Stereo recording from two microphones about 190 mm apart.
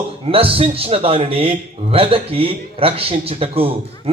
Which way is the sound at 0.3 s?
30° right (ahead or behind).